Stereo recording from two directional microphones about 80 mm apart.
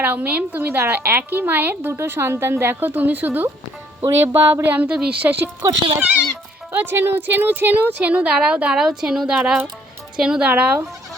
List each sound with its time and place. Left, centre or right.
0.0 s a woman's voice: right
4.1 s a sound: right
4.8 s speech: centre
6.7 s speech: right